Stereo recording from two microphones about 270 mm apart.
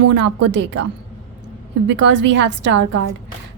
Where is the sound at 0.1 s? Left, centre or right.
Right.